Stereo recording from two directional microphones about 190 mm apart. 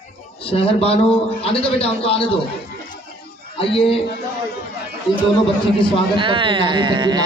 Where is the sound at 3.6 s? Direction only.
30° left (ahead or behind).